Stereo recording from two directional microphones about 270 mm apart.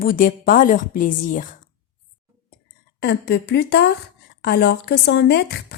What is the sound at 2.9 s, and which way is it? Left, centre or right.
A woman's voice, left.